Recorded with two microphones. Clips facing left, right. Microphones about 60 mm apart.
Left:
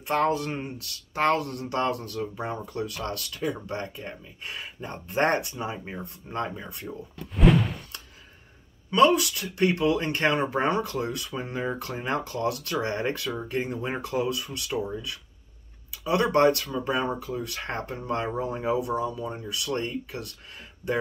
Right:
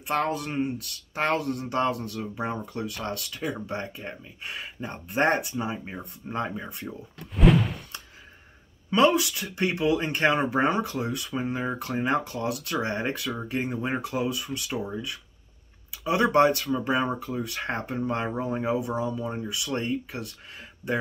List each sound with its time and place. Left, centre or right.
0.1 s speech: centre
1.2 s speech: centre
3.0 s speech: right
3.4 s speech: centre
7.3 s a sound: centre
8.9 s speech: centre
16.0 s speech: centre
18.3 s speech: centre
19.6 s speech: centre